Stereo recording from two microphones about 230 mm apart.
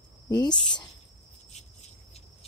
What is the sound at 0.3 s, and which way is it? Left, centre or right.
Speech, centre.